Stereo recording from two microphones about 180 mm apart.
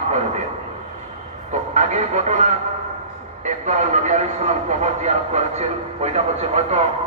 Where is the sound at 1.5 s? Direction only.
40° right (ahead or behind).